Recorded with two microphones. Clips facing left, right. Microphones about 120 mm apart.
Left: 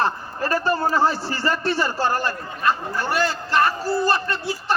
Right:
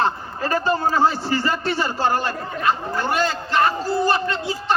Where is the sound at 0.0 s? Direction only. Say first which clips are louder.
Right 1 dB; 20° right (ahead or behind).